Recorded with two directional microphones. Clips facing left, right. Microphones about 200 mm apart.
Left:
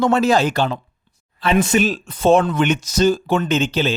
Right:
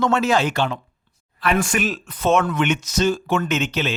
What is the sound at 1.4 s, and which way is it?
Speech, 25° left (ahead or behind).